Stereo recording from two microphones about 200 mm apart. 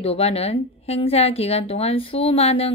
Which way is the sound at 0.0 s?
30° left (ahead or behind).